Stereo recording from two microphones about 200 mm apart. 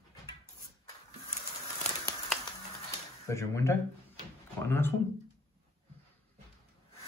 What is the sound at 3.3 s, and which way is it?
Speech, 15° left (ahead or behind).